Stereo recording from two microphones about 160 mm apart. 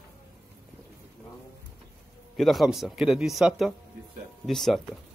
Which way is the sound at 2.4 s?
Centre (ahead or behind).